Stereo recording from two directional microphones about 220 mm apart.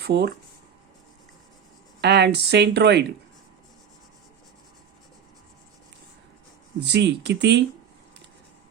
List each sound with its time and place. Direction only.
0.0 s speech: 45° right (ahead or behind)
2.0 s speech: 50° right (ahead or behind)
6.8 s speech: 50° right (ahead or behind)